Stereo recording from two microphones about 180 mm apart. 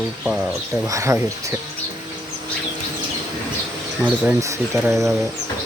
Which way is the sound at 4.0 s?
15° right (ahead or behind).